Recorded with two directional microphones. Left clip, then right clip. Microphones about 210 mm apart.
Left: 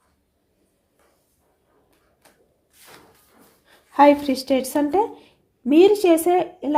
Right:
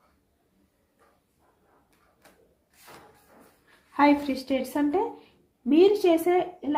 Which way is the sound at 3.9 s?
55° left (ahead or behind).